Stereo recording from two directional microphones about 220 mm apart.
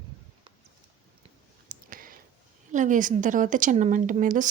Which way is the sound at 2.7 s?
35° right (ahead or behind).